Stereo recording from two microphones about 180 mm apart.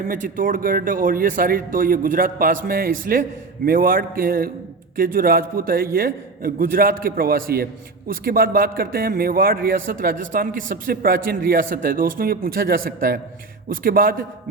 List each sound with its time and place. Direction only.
0.1 s a man's voice: 50° right (ahead or behind)